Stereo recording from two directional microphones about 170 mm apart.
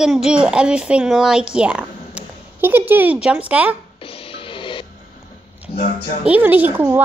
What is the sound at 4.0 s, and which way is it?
Music, 35° left (ahead or behind).